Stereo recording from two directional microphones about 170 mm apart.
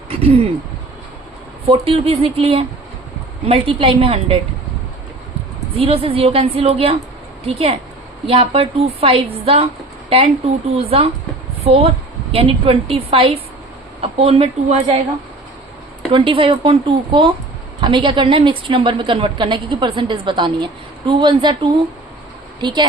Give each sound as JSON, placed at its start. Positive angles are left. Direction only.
{"t": 0.1, "sound": "a sound", "side_deg": -35}
{"t": 1.8, "sound": "a woman's voice", "side_deg": -35}
{"t": 5.7, "sound": "a woman's voice", "side_deg": -35}
{"t": 16.1, "sound": "a woman's voice", "side_deg": -30}